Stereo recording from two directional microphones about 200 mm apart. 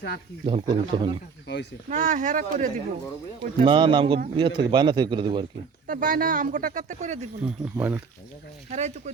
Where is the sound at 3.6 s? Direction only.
25° right (ahead or behind).